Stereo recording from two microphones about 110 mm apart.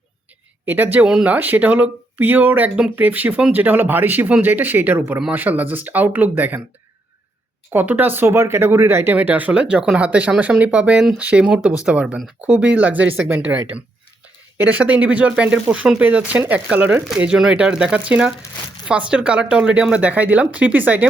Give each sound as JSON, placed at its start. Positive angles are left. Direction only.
{"t": 0.6, "sound": "speech", "side_deg": -15}
{"t": 7.7, "sound": "speech", "side_deg": -15}
{"t": 14.6, "sound": "speech", "side_deg": -15}